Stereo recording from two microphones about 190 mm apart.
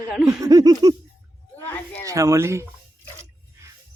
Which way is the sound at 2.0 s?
15° right (ahead or behind).